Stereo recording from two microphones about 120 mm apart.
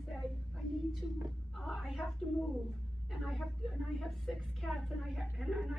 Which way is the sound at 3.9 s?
Centre (ahead or behind).